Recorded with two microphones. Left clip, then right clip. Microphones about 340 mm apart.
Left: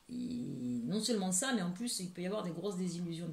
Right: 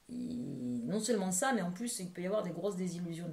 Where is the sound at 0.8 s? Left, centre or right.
Centre.